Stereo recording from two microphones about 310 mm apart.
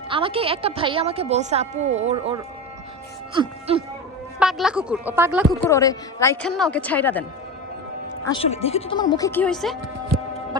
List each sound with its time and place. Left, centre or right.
0.1 s a woman's voice: centre
4.4 s a woman's voice: centre
5.6 s a woman's voice: centre
8.2 s a woman's voice: centre